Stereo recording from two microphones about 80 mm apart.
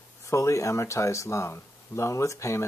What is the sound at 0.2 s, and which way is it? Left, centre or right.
Speech, left.